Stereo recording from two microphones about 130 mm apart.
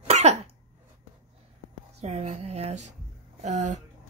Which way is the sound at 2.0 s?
60° right (ahead or behind).